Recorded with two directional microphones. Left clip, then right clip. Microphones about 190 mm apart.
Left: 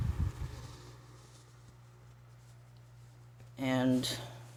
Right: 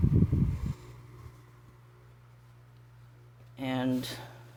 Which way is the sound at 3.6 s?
20° right (ahead or behind).